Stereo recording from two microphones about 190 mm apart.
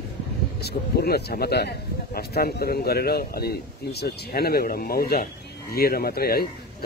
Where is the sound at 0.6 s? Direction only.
55° left (ahead or behind).